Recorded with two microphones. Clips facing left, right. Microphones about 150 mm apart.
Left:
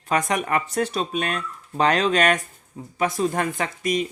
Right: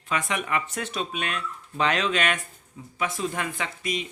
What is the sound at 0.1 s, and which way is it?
Speech, 40° left (ahead or behind).